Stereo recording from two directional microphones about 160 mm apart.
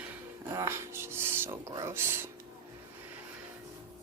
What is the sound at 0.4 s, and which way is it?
Speech, 15° right (ahead or behind).